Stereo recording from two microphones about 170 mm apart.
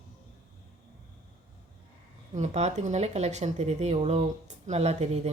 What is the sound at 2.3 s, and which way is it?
Speech, 40° right (ahead or behind).